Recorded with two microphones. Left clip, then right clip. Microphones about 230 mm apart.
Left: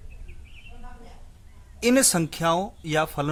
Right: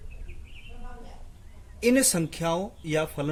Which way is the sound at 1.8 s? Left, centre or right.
Left.